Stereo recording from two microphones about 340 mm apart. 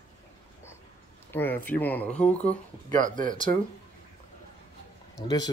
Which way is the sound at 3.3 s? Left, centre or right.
Centre.